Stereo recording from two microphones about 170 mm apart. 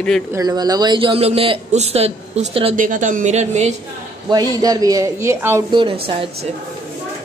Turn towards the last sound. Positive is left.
turn(degrees=-30)  # may be behind; listen again after turning